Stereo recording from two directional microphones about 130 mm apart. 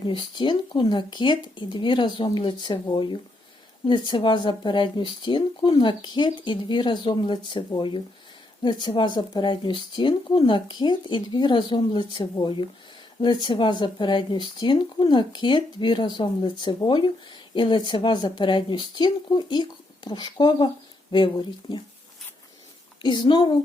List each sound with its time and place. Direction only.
0.0 s speech: 40° left (ahead or behind)
23.0 s speech: 35° left (ahead or behind)